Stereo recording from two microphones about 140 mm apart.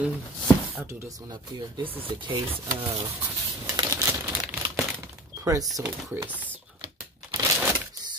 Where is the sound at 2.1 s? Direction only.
40° right (ahead or behind).